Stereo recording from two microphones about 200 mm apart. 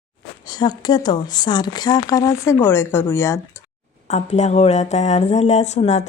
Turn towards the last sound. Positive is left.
turn(degrees=35)  # may be behind; listen again after turning